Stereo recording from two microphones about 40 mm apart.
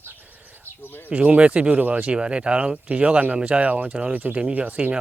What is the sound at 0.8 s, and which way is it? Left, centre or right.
Speech, left.